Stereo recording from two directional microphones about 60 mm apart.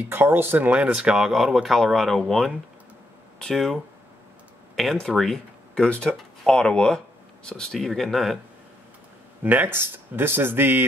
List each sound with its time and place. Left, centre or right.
0.1 s speech: right
0.7 s speech: centre
1.1 s speech: centre
4.9 s speech: centre
5.8 s speech: centre
9.4 s speech: right